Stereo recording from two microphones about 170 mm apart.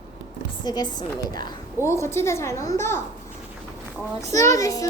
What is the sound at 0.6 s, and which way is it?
A child's voice, 25° left (ahead or behind).